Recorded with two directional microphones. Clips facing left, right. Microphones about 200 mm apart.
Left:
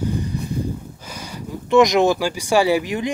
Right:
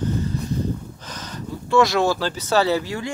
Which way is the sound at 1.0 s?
10° left (ahead or behind).